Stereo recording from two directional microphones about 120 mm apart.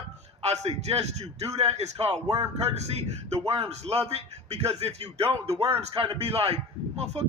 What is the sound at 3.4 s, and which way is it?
A man's voice, 55° right (ahead or behind).